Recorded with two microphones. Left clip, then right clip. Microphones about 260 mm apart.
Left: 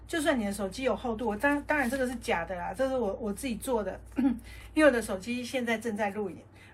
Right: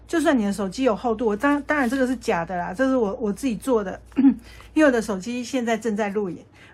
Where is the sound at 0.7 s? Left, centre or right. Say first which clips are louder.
Right 10 dB; right.